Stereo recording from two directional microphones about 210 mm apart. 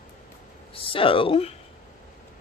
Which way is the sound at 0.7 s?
25° left (ahead or behind).